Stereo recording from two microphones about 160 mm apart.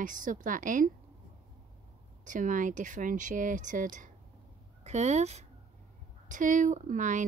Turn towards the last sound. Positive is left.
turn(degrees=-50)  # may be behind; listen again after turning